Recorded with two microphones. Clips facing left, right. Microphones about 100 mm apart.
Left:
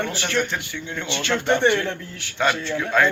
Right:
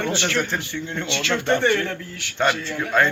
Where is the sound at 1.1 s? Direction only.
20° left (ahead or behind).